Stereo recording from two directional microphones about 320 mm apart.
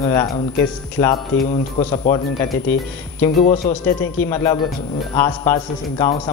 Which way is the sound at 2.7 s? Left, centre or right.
Centre.